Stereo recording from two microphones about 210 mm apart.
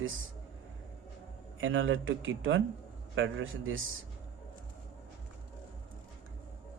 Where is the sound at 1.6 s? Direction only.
65° right (ahead or behind).